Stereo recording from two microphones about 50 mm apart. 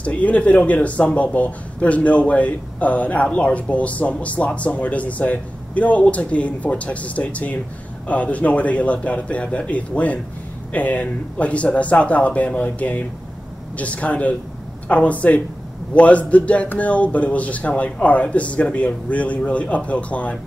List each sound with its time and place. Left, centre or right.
0.0 s speech: left